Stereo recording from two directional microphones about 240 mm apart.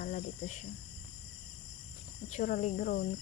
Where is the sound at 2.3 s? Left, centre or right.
Left.